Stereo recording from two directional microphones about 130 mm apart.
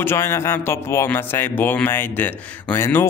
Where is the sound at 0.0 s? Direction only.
20° left (ahead or behind).